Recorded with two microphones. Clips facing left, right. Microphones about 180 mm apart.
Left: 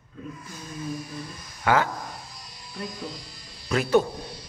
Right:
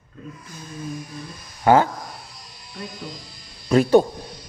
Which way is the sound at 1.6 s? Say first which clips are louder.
Right 7 dB; 30° right (ahead or behind).